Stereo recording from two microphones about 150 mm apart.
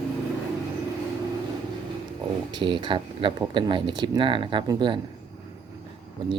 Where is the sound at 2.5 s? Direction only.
30° right (ahead or behind).